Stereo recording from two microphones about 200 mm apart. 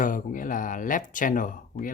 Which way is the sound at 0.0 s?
40° left (ahead or behind).